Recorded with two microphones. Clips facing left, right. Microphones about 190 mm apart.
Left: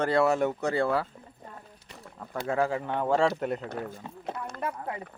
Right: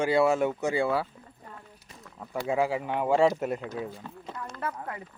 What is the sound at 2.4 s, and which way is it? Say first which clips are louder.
A man's voice: even; 10° right (ahead or behind).